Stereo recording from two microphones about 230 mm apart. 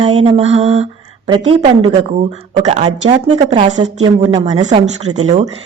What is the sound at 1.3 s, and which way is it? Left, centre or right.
Speech, right.